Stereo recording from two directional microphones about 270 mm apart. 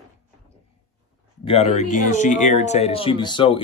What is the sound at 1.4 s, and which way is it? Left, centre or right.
Speech, left.